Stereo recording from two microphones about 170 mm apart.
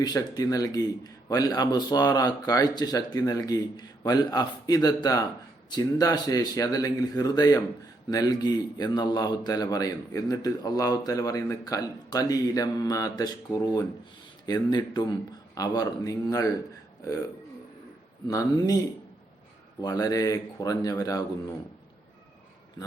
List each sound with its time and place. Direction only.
0.0 s a man's voice: 20° left (ahead or behind)
18.3 s a man's voice: 20° left (ahead or behind)
19.8 s a man's voice: 20° left (ahead or behind)